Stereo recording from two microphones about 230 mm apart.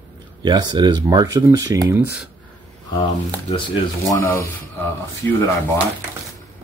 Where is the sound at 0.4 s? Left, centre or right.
Centre.